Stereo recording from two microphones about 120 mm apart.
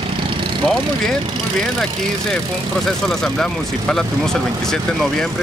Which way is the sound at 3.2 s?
5° left (ahead or behind).